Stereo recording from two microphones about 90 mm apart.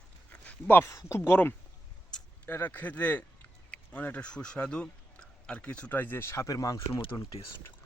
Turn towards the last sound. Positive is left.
turn(degrees=35)  # may be behind; listen again after turning